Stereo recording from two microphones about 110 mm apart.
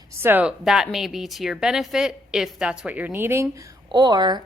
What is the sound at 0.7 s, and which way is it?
A woman's voice, 5° right (ahead or behind).